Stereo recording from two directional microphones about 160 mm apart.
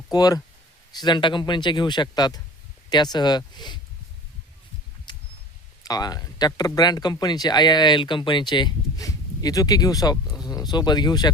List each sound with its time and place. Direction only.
0.1 s speech: 25° left (ahead or behind)
5.1 s a sound: 30° left (ahead or behind)
5.8 s speech: 25° left (ahead or behind)